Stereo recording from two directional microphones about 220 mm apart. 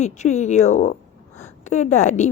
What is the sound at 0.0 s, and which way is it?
A woman's voice, 30° left (ahead or behind).